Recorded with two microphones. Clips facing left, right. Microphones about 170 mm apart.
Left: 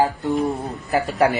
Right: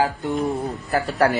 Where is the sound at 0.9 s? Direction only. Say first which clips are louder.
Left 1 dB; centre (ahead or behind).